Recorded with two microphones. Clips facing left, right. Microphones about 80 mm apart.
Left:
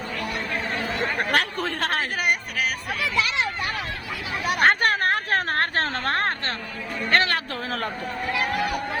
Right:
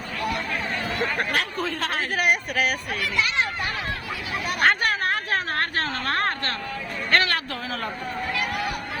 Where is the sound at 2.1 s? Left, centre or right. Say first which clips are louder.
Right 2 dB; centre.